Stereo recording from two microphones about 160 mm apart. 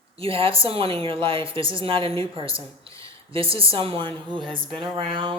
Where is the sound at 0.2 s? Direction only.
35° right (ahead or behind).